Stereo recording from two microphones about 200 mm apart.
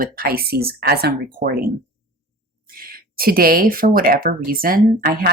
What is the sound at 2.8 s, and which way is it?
A woman's voice, 45° right (ahead or behind).